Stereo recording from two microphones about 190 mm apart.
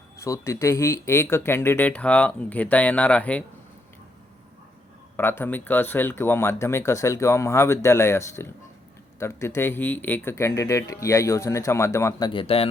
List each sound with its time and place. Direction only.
0.2 s speech: 15° left (ahead or behind)
5.1 s speech: 10° left (ahead or behind)
12.3 s speech: 30° left (ahead or behind)